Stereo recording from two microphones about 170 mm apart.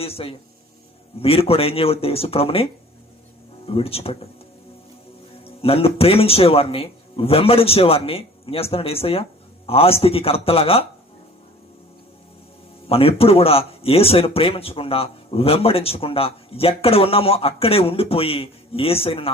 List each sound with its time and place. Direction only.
0.0 s speech: 35° left (ahead or behind)
3.7 s speech: 35° left (ahead or behind)
5.6 s speech: 35° left (ahead or behind)
12.9 s speech: 35° left (ahead or behind)